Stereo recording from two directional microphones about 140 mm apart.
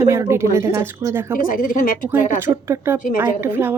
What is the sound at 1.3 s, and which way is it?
Speech, 75° left (ahead or behind).